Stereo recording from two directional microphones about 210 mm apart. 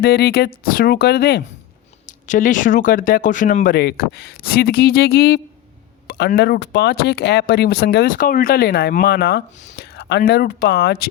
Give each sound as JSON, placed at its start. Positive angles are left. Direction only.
{"t": 0.0, "sound": "speech", "side_deg": 50}
{"t": 2.0, "sound": "speech", "side_deg": 35}